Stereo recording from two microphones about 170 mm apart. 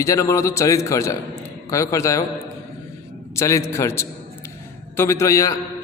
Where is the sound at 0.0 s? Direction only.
20° left (ahead or behind).